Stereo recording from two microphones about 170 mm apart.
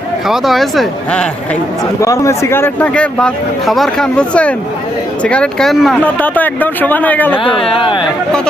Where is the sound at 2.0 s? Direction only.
15° left (ahead or behind).